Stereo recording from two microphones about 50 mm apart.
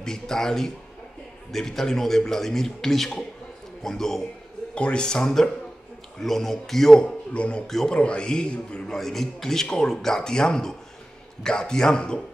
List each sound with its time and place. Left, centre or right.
0.0 s speech: centre
4.7 s speech: left
7.3 s a man's voice: left
7.6 s speech: centre
8.0 s a man's voice: left
8.9 s speech: centre